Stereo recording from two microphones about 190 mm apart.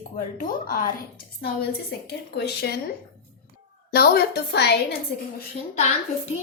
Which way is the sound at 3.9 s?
55° left (ahead or behind).